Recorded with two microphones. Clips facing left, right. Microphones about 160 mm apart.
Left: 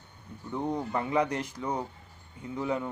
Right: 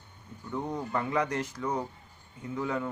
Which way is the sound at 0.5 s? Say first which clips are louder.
Left 2 dB; 15° left (ahead or behind).